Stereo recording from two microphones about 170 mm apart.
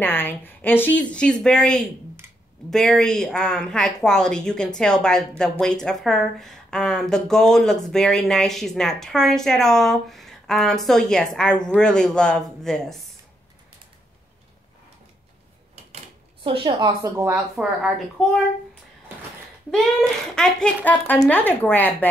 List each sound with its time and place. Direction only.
0.0 s a woman's voice: 10° left (ahead or behind)
16.4 s a woman's voice: 30° right (ahead or behind)
17.6 s a woman's voice: centre (ahead or behind)
19.7 s speech: 5° left (ahead or behind)